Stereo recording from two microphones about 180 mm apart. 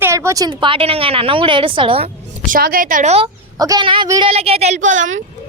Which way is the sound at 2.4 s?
50° right (ahead or behind).